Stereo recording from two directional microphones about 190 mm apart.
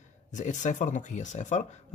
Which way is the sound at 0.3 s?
40° left (ahead or behind).